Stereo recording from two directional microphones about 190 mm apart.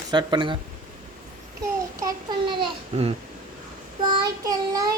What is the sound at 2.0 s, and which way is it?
A child's voice, 25° right (ahead or behind).